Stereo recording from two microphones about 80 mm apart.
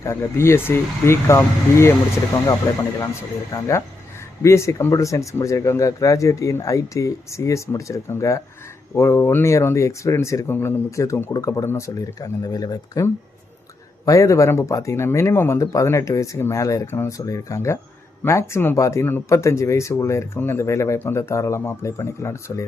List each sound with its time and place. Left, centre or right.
0.0 s speech: left
11.6 s speech: left
12.2 s speech: left
16.8 s speech: left
17.1 s speech: left